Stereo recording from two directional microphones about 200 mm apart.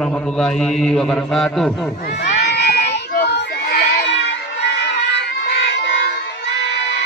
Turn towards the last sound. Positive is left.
turn(degrees=60)  # may be behind; listen again after turning